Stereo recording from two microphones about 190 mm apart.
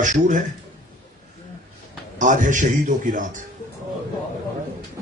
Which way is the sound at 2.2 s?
40° right (ahead or behind).